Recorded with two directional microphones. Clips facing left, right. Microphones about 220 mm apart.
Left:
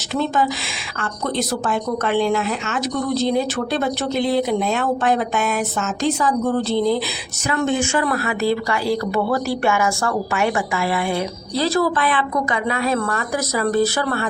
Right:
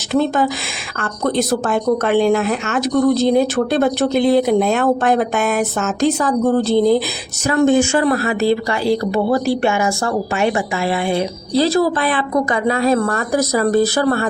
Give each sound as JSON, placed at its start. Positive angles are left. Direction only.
{"t": 0.1, "sound": "a woman's voice", "side_deg": -50}